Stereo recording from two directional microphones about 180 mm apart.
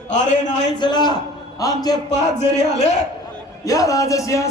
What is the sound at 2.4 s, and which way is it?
Speech, 40° left (ahead or behind).